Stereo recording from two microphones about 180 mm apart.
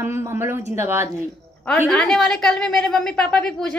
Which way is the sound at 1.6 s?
5° left (ahead or behind).